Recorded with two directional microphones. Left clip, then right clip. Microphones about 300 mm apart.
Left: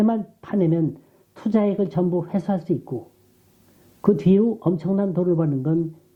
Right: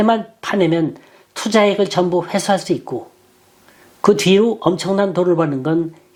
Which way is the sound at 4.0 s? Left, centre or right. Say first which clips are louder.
Right 7 dB; centre.